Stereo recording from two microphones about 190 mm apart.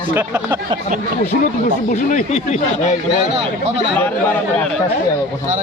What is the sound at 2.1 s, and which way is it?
Speech, 40° left (ahead or behind).